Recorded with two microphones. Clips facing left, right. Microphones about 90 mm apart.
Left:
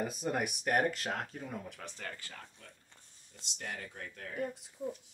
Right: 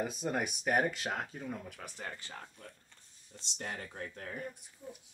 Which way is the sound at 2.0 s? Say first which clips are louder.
Right 1 dB; 20° right (ahead or behind).